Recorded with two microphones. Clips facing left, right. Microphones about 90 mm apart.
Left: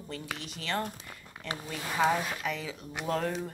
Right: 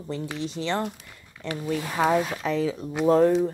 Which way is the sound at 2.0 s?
20° right (ahead or behind).